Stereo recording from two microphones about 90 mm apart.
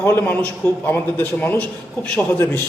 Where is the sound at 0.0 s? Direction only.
25° left (ahead or behind).